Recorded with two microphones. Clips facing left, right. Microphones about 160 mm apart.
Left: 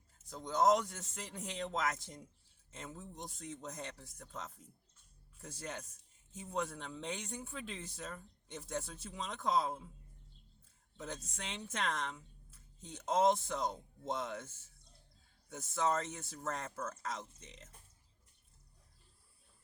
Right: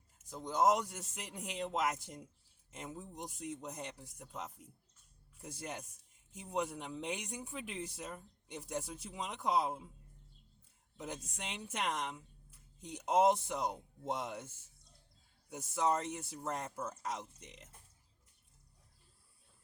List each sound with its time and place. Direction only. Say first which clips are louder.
0.2 s speech: even; 10° right (ahead or behind)
10.9 s speech: right 1 dB; 10° right (ahead or behind)